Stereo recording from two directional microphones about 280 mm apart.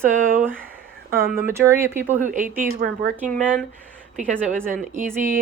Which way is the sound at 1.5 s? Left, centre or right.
Centre.